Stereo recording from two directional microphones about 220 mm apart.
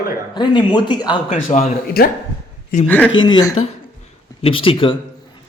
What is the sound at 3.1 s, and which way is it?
Speech, 60° left (ahead or behind).